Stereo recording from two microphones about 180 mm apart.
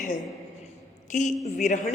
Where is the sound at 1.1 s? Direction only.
45° left (ahead or behind).